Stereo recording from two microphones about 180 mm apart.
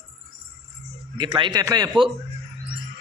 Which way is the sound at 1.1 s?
25° right (ahead or behind).